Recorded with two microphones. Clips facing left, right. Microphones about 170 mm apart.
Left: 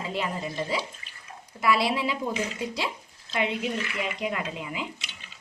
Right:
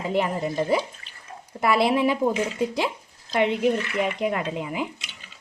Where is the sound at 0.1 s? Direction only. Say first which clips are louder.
Right 8 dB; 55° right (ahead or behind).